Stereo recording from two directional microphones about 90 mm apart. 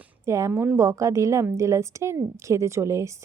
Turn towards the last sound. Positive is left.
turn(degrees=-30)  # may be behind; listen again after turning